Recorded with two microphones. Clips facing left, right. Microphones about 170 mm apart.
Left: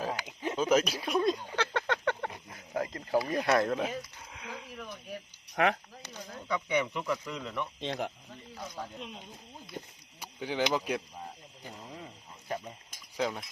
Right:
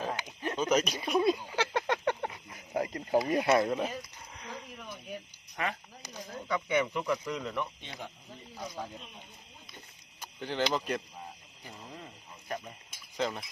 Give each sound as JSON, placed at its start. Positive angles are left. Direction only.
{"t": 0.3, "sound": "a sound", "side_deg": 10}
{"t": 2.7, "sound": "cricket", "side_deg": -15}
{"t": 3.4, "sound": "a sound", "side_deg": -5}
{"t": 5.6, "sound": "speech", "side_deg": 65}
{"t": 6.0, "sound": "speech", "side_deg": 0}
{"t": 7.8, "sound": "speech", "side_deg": 85}
{"t": 8.8, "sound": "speech", "side_deg": -10}
{"t": 10.2, "sound": "speech", "side_deg": 10}
{"t": 11.9, "sound": "a sound", "side_deg": 10}
{"t": 13.1, "sound": "speech", "side_deg": 5}